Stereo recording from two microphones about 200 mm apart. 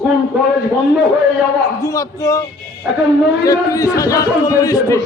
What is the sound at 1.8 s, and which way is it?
A man's voice, 15° left (ahead or behind).